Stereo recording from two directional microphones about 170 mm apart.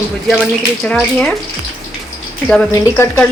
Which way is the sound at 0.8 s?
5° left (ahead or behind).